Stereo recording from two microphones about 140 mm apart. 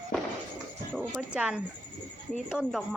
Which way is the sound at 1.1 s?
5° right (ahead or behind).